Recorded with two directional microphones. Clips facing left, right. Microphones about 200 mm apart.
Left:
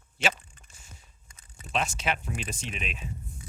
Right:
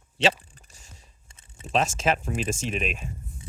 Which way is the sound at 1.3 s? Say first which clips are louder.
Right 7 dB; 25° right (ahead or behind).